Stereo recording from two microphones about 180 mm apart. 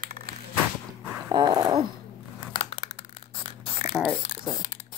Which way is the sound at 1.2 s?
25° right (ahead or behind).